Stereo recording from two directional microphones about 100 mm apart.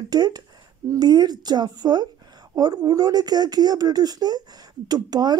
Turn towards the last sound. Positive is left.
turn(degrees=-40)  # may be behind; listen again after turning